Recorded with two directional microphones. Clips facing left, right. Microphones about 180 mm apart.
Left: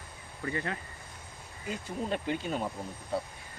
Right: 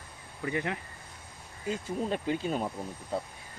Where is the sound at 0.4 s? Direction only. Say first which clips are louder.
Right 2 dB; 15° right (ahead or behind).